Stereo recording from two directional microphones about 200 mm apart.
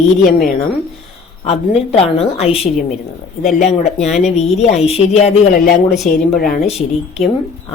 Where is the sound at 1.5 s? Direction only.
30° left (ahead or behind).